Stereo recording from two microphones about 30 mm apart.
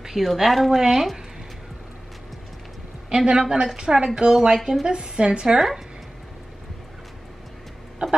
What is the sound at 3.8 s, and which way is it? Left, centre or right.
Speech, right.